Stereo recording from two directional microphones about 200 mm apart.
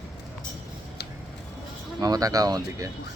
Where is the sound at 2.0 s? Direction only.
15° right (ahead or behind).